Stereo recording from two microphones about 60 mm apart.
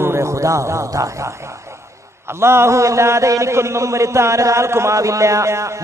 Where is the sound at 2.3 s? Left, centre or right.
Right.